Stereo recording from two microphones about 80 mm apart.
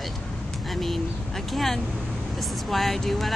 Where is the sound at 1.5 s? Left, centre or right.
Centre.